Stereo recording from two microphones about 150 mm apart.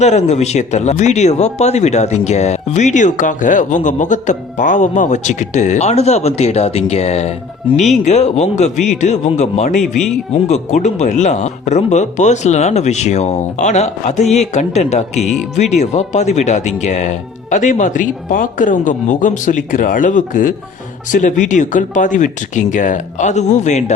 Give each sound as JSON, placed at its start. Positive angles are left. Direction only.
{"t": 0.0, "sound": "speech", "side_deg": 50}